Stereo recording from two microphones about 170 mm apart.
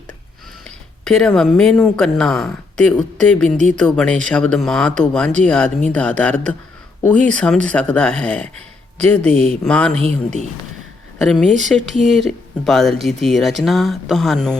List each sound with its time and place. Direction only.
1.0 s speech: 5° left (ahead or behind)
9.3 s speech: 35° right (ahead or behind)
9.6 s speech: 5° left (ahead or behind)
11.2 s speech: centre (ahead or behind)